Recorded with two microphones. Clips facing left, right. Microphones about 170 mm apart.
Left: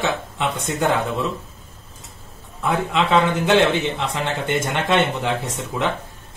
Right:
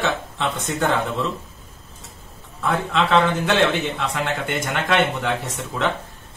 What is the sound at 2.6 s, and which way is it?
A man's voice, 15° left (ahead or behind).